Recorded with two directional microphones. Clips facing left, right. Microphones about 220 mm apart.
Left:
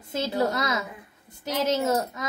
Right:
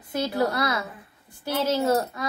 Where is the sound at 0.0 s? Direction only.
25° left (ahead or behind).